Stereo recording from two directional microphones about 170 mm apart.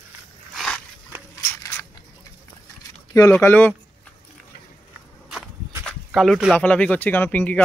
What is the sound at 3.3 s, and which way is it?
Speech, 10° left (ahead or behind).